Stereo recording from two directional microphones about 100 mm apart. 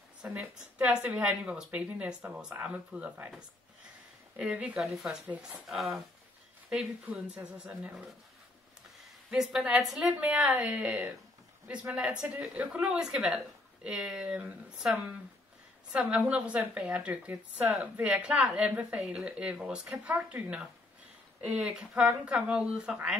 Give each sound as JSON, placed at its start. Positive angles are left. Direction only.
{"t": 0.2, "sound": "a woman's voice", "side_deg": -10}
{"t": 5.2, "sound": "a woman's voice", "side_deg": -15}
{"t": 5.6, "sound": "speech", "side_deg": 0}
{"t": 6.7, "sound": "a woman's voice", "side_deg": -10}
{"t": 9.3, "sound": "a woman's voice", "side_deg": -5}